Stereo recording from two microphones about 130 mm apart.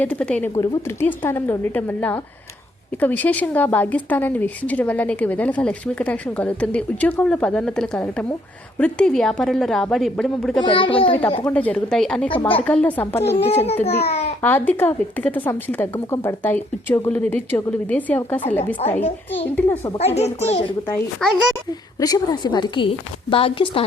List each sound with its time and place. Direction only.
0.0 s a woman's voice: 10° left (ahead or behind)
10.6 s a child's voice: 40° left (ahead or behind)
11.5 s speech: 10° left (ahead or behind)
13.2 s a child's voice: 50° left (ahead or behind)
14.4 s speech: 15° left (ahead or behind)
18.8 s a child's voice: 55° left (ahead or behind)
19.5 s speech: 15° left (ahead or behind)
20.0 s a child's voice: 55° left (ahead or behind)
21.2 s a woman's voice: 5° left (ahead or behind)
21.7 s a woman's voice: 30° left (ahead or behind); by 23.8 s 45° left (ahead or behind)